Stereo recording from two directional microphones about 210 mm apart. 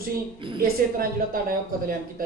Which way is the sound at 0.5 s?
45° right (ahead or behind).